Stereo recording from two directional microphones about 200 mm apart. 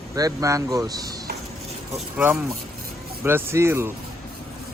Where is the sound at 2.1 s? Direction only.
10° right (ahead or behind).